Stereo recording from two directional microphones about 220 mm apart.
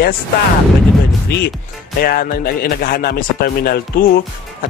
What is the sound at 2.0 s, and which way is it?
Speech, 45° left (ahead or behind).